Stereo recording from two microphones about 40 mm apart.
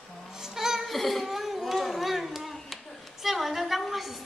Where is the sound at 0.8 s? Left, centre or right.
Centre.